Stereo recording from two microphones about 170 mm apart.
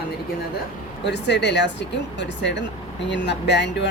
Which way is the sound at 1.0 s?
90° left.